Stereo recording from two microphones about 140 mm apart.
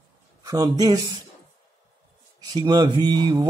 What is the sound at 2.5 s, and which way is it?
Speech, 30° right (ahead or behind).